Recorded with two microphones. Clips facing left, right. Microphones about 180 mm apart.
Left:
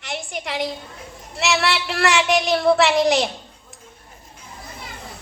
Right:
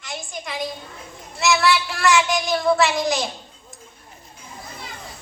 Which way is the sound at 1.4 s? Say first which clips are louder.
Right 2 dB; 65° left (ahead or behind).